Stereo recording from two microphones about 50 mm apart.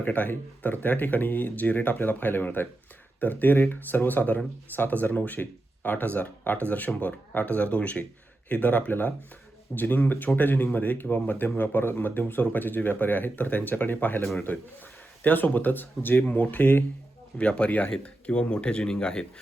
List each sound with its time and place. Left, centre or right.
0.0 s speech: left; by 19.2 s centre